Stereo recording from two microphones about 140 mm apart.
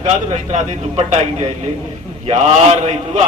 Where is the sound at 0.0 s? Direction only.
55° right (ahead or behind).